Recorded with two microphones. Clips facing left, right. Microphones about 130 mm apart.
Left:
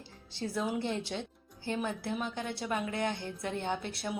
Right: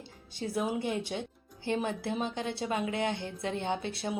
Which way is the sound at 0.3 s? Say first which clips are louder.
Right 2 dB; 20° right (ahead or behind).